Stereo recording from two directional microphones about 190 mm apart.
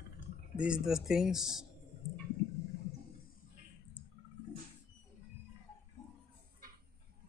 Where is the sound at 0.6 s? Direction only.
5° right (ahead or behind).